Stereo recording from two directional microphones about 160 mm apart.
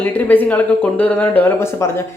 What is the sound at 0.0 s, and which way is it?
Speech, 10° left (ahead or behind).